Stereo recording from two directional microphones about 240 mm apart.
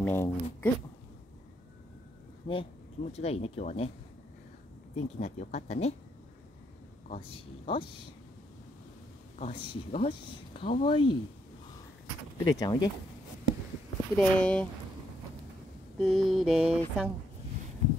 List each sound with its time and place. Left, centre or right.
0.0 s speech: centre
2.4 s speech: left
4.9 s speech: left
7.3 s speech: left
9.4 s speech: left
12.4 s speech: centre
14.1 s a sound: centre
16.0 s a sound: centre